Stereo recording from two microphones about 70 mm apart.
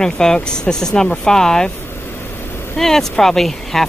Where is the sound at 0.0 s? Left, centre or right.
Centre.